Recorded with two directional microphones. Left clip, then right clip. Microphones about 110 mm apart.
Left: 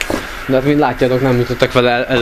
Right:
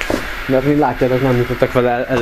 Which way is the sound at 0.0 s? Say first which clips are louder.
Even; 35° left (ahead or behind).